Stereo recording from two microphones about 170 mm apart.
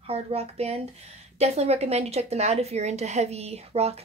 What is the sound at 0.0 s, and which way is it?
A woman's voice, 35° right (ahead or behind).